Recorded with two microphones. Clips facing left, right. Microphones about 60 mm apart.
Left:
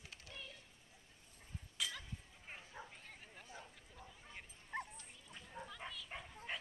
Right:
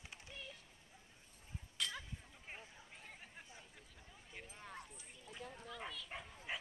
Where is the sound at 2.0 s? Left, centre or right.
Centre.